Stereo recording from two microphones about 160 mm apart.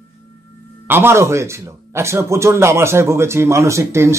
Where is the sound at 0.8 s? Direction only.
15° right (ahead or behind).